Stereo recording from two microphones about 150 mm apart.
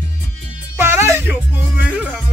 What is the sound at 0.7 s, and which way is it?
Music, 15° right (ahead or behind).